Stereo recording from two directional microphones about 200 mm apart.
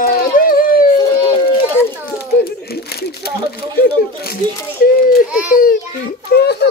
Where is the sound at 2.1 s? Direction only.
50° left (ahead or behind).